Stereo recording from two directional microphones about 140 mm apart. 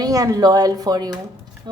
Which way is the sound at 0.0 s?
25° right (ahead or behind).